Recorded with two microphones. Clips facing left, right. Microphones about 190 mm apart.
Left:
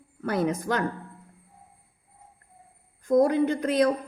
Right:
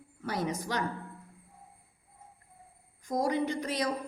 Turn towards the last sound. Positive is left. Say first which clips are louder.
# left 9 dB
turn(degrees=55)  # may be behind; listen again after turning